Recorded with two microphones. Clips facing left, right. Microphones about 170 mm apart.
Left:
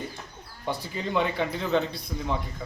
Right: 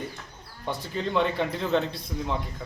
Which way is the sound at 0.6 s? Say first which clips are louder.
Right 1 dB; 5° left (ahead or behind).